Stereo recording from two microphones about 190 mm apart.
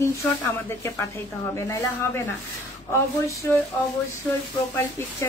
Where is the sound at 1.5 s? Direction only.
15° left (ahead or behind).